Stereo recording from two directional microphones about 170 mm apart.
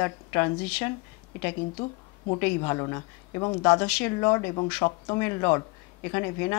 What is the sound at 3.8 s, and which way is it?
Speech, 10° left (ahead or behind).